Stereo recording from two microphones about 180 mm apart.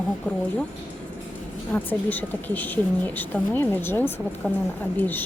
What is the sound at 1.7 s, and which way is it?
Speech, 10° left (ahead or behind).